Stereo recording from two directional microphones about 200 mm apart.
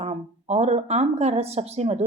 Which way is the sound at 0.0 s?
35° right (ahead or behind).